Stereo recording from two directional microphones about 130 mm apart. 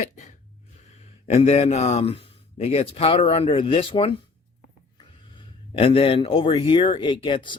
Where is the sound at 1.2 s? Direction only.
55° left (ahead or behind).